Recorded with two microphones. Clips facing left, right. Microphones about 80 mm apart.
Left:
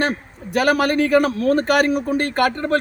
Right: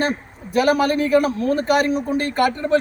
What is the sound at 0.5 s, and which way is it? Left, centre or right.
A man's voice, left.